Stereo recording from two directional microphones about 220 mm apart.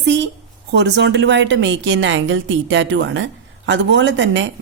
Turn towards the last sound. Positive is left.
turn(degrees=-55)  # may be behind; listen again after turning